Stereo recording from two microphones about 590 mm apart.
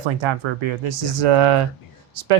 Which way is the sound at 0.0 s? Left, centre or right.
Right.